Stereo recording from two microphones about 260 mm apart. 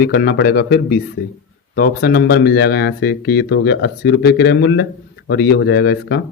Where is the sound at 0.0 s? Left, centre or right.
Left.